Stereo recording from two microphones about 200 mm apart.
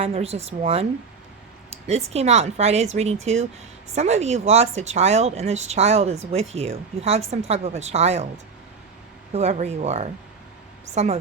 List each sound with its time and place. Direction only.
0.0 s speech: 30° right (ahead or behind)
9.3 s speech: 35° right (ahead or behind)